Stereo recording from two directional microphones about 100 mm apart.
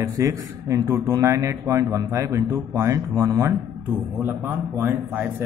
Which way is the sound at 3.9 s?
20° right (ahead or behind).